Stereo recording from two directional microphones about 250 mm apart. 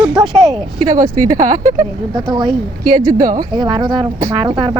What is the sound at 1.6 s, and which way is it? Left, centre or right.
Speech, centre.